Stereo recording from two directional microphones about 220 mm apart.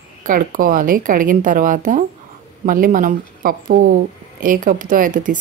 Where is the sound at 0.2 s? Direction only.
40° right (ahead or behind).